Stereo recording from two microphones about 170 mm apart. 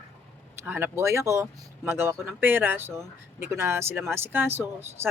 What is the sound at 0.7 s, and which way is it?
Speech, 10° right (ahead or behind).